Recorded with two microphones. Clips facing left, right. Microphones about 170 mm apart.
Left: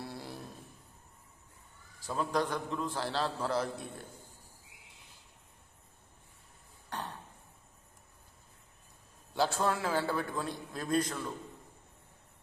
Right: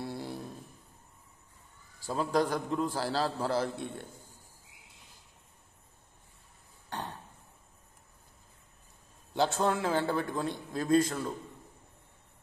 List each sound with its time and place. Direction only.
0.0 s a sound: 25° right (ahead or behind)
2.0 s a man's voice: 35° right (ahead or behind)
9.3 s a man's voice: 20° right (ahead or behind)